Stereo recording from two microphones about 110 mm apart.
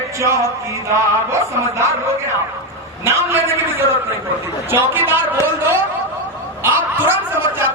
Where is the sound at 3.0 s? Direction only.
25° right (ahead or behind).